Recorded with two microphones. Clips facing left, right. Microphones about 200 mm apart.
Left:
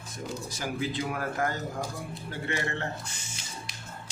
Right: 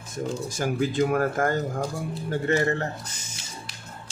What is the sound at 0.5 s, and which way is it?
A man's voice, 50° right (ahead or behind).